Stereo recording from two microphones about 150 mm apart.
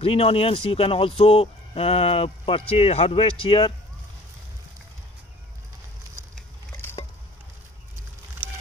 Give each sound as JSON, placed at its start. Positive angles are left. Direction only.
{"t": 0.0, "sound": "speech", "side_deg": 40}